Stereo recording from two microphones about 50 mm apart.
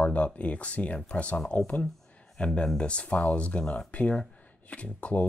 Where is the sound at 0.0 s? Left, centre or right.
Left.